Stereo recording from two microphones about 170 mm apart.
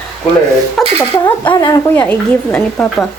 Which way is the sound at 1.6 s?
20° left (ahead or behind).